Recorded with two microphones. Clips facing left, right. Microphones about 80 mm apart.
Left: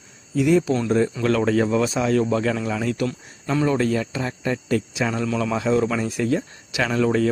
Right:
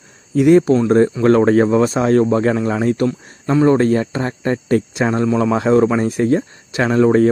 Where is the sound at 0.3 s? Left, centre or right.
Right.